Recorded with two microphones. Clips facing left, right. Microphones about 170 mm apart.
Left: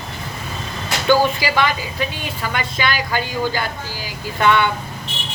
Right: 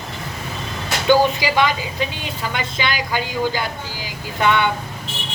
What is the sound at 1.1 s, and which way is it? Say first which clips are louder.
Speech: right 1 dB; 20° right (ahead or behind).